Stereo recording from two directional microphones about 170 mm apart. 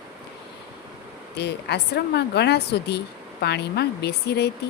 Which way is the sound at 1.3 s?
75° left (ahead or behind).